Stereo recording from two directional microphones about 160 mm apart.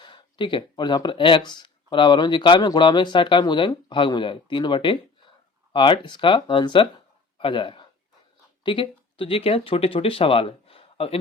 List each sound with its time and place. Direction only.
0.0 s speech: 30° left (ahead or behind)